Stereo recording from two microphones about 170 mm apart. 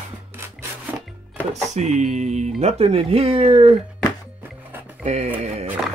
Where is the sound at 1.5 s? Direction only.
45° right (ahead or behind).